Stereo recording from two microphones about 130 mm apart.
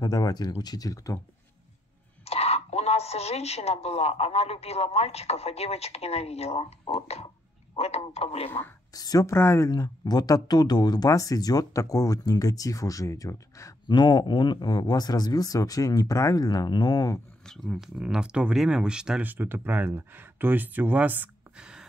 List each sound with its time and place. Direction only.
0.0 s speech: 30° left (ahead or behind)
2.2 s a woman's voice: 55° left (ahead or behind)
8.9 s speech: 30° left (ahead or behind)
17.5 s speech: centre (ahead or behind)